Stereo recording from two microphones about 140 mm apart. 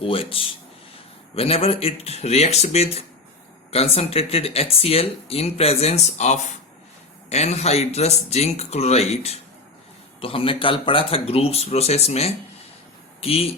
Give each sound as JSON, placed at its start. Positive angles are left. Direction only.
{"t": 0.0, "sound": "speech", "side_deg": 40}